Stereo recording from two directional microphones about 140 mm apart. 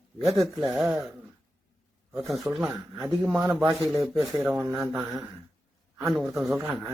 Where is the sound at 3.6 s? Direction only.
20° right (ahead or behind).